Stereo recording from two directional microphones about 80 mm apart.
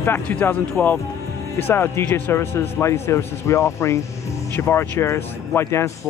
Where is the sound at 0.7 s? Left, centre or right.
Left.